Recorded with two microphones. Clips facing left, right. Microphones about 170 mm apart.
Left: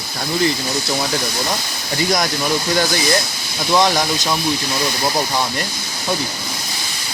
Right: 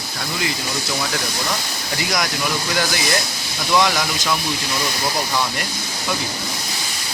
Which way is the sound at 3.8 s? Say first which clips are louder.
Left 3 dB; 35° left (ahead or behind).